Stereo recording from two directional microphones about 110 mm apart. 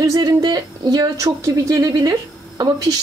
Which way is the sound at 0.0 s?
30° right (ahead or behind).